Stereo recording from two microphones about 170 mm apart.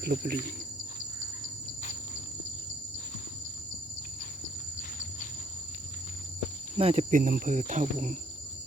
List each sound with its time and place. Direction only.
0.0 s speech: 65° right (ahead or behind)
4.8 s a sound: 50° left (ahead or behind)
6.7 s speech: 35° right (ahead or behind)
7.1 s speech: 55° right (ahead or behind)